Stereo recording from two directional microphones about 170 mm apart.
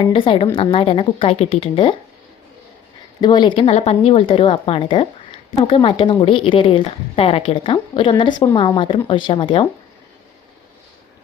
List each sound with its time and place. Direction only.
0.0 s speech: 30° left (ahead or behind)
3.2 s a woman's voice: 25° left (ahead or behind)